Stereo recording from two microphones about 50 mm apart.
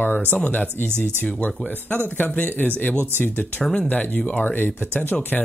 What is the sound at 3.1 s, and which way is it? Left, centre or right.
Speech, left.